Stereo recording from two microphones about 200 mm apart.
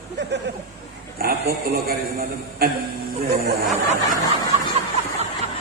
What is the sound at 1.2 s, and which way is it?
A man's voice, 50° right (ahead or behind).